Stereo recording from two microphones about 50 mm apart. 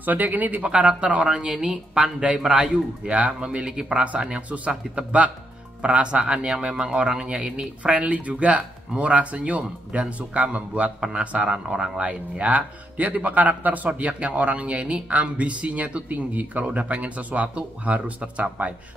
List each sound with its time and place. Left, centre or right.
0.0 s speech: right
0.7 s a man's voice: right
3.1 s a man's voice: right
3.4 s a man's voice: centre